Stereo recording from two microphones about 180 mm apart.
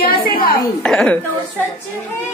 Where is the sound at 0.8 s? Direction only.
5° left (ahead or behind).